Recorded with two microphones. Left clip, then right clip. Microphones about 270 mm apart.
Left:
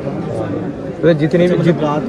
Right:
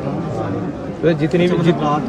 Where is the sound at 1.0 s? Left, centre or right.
Centre.